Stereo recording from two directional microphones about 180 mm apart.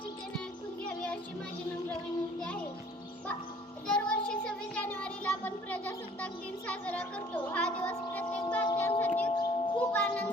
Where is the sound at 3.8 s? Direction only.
5° left (ahead or behind).